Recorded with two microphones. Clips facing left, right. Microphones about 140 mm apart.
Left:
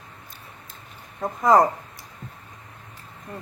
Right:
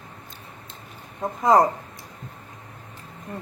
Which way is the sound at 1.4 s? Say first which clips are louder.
Even; 25° right (ahead or behind).